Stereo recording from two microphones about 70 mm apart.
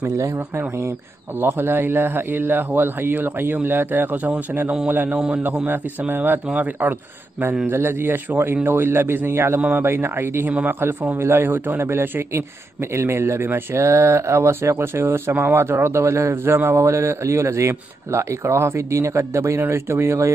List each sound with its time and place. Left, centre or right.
0.0 s speech: right
1.4 s a man's voice: right